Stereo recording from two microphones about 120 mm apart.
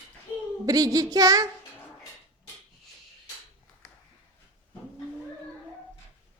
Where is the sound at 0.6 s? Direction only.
30° right (ahead or behind).